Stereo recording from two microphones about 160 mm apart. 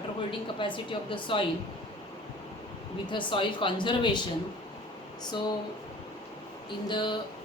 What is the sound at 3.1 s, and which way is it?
Speech, 30° left (ahead or behind).